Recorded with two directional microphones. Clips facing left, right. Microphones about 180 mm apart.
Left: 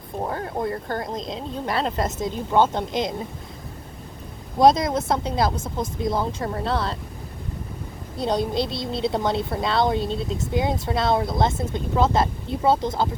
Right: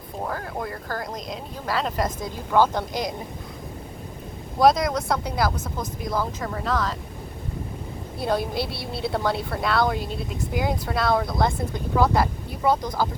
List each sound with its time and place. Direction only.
0.3 s speech: 25° left (ahead or behind)
4.6 s speech: 25° left (ahead or behind)
8.2 s speech: 20° left (ahead or behind)